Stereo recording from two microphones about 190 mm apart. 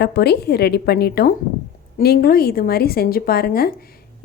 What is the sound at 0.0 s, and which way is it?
A woman's voice, 60° left (ahead or behind).